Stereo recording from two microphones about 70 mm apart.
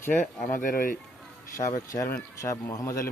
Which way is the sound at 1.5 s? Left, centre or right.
Left.